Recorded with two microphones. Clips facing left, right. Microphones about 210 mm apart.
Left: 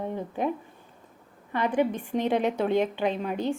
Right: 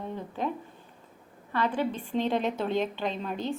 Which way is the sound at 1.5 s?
15° left (ahead or behind).